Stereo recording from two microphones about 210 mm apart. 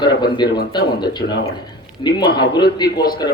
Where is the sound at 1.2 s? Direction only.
50° left (ahead or behind).